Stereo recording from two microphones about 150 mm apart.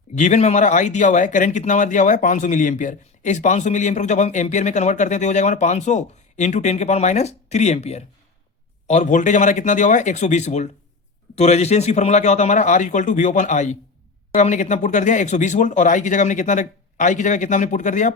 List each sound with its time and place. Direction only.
0.2 s speech: 50° left (ahead or behind)